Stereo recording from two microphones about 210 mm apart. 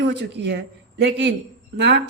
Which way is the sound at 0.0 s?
55° right (ahead or behind).